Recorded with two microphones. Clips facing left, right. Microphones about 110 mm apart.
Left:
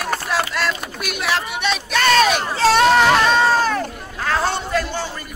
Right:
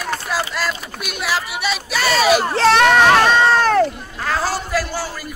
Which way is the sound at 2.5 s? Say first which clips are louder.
Right 1 dB; 65° right (ahead or behind).